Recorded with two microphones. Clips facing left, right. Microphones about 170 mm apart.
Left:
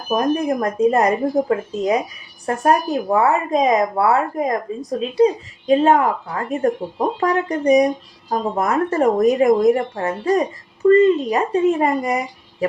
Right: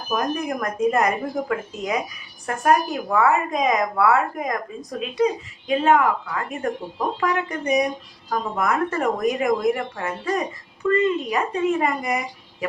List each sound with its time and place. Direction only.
0.1 s speech: 30° left (ahead or behind)